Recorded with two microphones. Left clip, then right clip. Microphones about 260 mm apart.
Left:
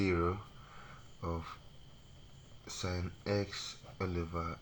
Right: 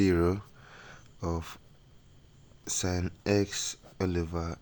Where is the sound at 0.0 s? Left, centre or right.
Right.